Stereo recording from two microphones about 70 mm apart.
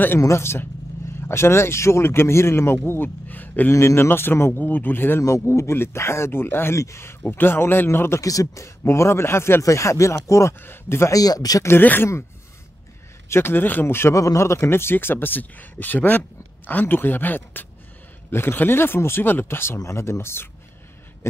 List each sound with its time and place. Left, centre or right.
0.2 s speech: left
3.7 s speech: left
5.2 s speech: left
8.2 s speech: left
11.1 s speech: left
11.8 s a man's voice: left
13.3 s speech: left
14.1 s a man's voice: left